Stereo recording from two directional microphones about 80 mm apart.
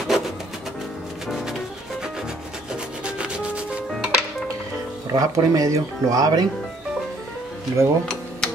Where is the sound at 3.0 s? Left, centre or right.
Centre.